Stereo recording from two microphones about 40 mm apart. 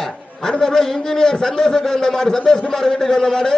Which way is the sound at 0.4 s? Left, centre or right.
Centre.